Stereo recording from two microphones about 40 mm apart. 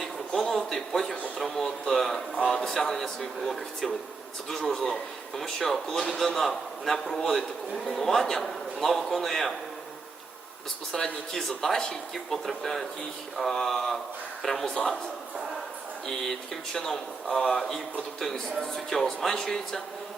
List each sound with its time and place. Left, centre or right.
0.5 s speech: centre
1.6 s speech: centre
10.9 s speech: centre
16.0 s speech: centre